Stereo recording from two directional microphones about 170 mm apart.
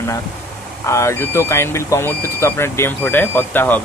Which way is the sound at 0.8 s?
15° left (ahead or behind).